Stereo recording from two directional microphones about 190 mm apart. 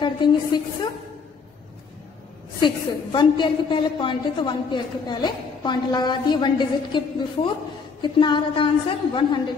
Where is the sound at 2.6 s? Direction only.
25° left (ahead or behind).